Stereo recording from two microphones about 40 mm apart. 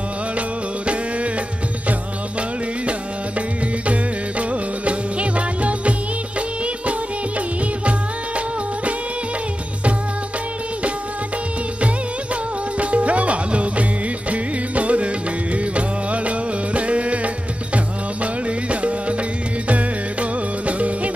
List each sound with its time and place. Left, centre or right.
2.9 s music: right
12.7 s music: right